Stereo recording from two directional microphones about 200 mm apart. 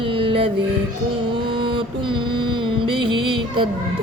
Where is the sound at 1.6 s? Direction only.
25° right (ahead or behind).